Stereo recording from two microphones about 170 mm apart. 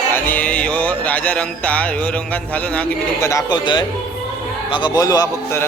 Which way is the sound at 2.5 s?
10° left (ahead or behind).